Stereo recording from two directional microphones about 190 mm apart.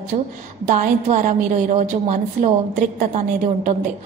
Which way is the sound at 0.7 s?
40° right (ahead or behind).